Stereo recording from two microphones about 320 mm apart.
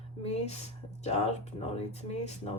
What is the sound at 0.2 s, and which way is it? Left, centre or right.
Speech, centre.